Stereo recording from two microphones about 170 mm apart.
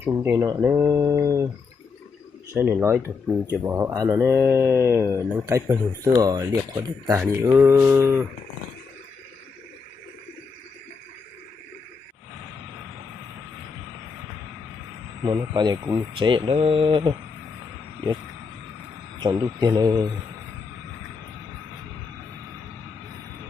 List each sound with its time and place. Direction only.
0.0 s speech: 15° right (ahead or behind)
2.5 s speech: 15° right (ahead or behind)
15.2 s speech: 25° right (ahead or behind)
19.2 s speech: 25° right (ahead or behind)